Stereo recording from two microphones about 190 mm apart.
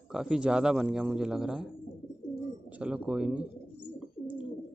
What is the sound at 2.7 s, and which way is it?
Speech, 5° right (ahead or behind).